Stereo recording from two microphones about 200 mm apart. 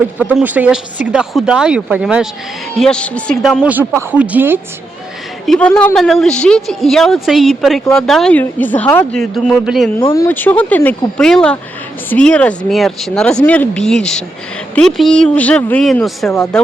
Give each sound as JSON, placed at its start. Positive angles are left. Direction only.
{"t": 0.2, "sound": "a woman's voice", "side_deg": -10}
{"t": 3.6, "sound": "a woman's voice", "side_deg": -10}
{"t": 5.5, "sound": "speech", "side_deg": 5}
{"t": 10.0, "sound": "speech", "side_deg": 25}
{"t": 10.2, "sound": "speech", "side_deg": 10}
{"t": 16.3, "sound": "speech", "side_deg": 15}